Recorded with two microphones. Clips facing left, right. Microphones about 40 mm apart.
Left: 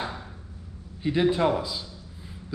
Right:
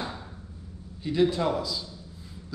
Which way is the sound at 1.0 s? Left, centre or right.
Left.